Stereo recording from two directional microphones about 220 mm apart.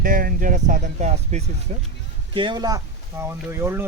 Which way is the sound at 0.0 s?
40° right (ahead or behind).